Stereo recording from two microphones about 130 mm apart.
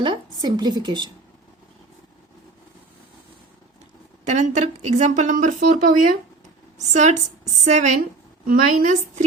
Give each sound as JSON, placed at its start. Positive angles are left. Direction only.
{"t": 0.0, "sound": "a woman's voice", "side_deg": -35}
{"t": 4.3, "sound": "a woman's voice", "side_deg": -65}
{"t": 6.7, "sound": "a woman's voice", "side_deg": -65}